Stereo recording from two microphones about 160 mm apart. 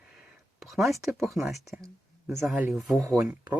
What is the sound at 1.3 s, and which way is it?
Speech, centre (ahead or behind).